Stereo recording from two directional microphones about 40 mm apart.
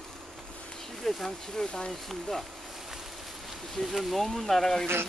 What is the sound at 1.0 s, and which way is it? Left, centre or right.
Bee, centre.